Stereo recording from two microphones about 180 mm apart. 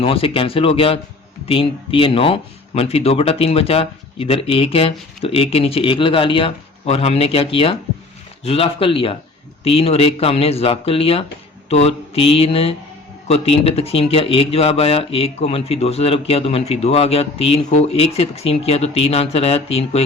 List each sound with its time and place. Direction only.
0.0 s speech: 30° left (ahead or behind)